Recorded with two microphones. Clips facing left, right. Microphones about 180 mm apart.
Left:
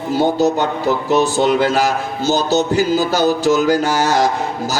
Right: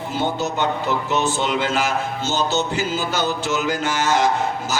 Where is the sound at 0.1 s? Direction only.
40° left (ahead or behind).